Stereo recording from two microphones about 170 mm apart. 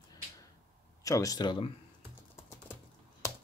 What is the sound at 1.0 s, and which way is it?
Speech, 20° left (ahead or behind).